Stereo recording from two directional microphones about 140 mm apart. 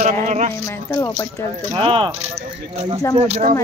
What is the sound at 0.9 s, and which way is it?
Speech, 20° left (ahead or behind).